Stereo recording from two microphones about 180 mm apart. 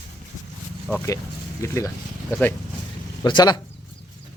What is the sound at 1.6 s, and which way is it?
Speech, 15° left (ahead or behind).